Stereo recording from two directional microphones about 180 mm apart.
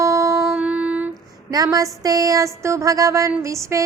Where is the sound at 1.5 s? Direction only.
20° right (ahead or behind).